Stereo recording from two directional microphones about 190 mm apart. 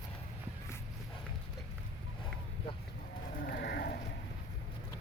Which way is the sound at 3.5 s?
60° left (ahead or behind).